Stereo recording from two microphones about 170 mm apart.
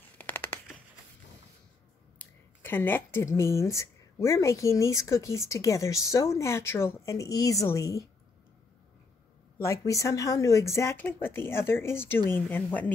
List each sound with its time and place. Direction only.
0.2 s a sound: 10° left (ahead or behind)
2.1 s speech: 10° left (ahead or behind)
9.6 s speech: 20° left (ahead or behind)